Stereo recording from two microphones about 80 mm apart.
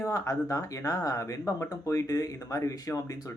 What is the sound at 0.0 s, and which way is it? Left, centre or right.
Speech, left.